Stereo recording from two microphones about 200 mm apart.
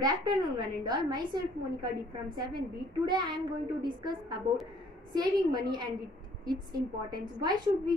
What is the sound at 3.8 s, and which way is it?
A woman's voice, 20° right (ahead or behind).